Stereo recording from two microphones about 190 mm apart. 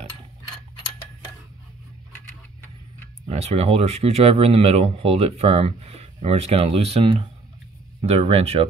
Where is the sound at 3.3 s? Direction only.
35° right (ahead or behind).